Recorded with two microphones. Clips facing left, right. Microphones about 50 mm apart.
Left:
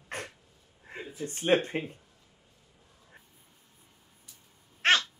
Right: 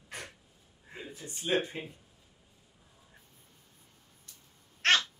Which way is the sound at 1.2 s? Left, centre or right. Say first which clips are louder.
Left 5 dB; left.